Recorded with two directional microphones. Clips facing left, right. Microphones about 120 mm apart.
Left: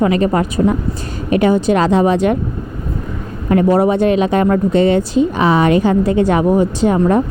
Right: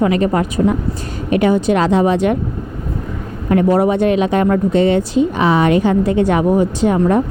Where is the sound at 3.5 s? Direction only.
30° left (ahead or behind).